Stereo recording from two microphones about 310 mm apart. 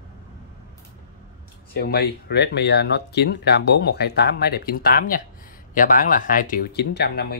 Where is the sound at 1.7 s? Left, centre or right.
Left.